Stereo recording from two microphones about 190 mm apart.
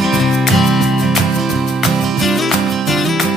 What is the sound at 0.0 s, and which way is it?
Music, centre (ahead or behind).